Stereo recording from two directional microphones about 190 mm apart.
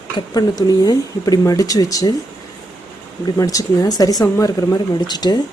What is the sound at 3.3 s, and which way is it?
Speech, 20° left (ahead or behind).